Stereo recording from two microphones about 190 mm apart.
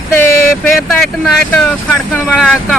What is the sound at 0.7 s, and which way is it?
Speech, centre (ahead or behind).